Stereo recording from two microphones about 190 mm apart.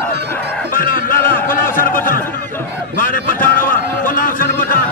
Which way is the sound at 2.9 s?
45° left (ahead or behind).